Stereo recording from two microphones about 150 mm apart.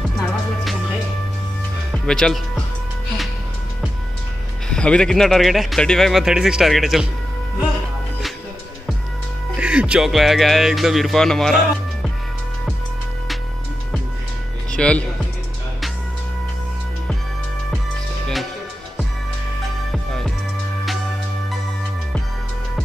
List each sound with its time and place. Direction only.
1.9 s speech: 5° left (ahead or behind)
4.6 s speech: 5° left (ahead or behind)
9.6 s speech: 5° right (ahead or behind)
14.7 s speech: 5° left (ahead or behind)
19.9 s music: 5° left (ahead or behind)